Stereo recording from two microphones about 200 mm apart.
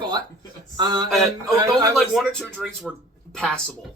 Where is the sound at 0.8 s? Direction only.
20° right (ahead or behind).